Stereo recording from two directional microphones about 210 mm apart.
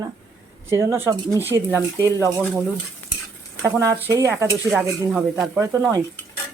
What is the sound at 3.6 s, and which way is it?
Speech, 15° right (ahead or behind).